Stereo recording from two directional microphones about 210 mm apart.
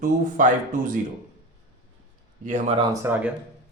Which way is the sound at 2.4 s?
30° right (ahead or behind).